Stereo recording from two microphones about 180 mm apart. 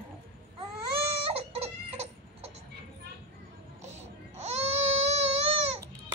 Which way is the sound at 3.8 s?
40° right (ahead or behind).